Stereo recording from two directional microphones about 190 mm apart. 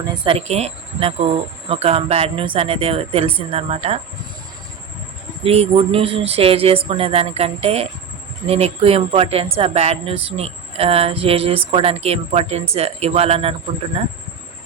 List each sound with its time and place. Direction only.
0.0 s speech: 25° right (ahead or behind)
5.4 s speech: 30° right (ahead or behind)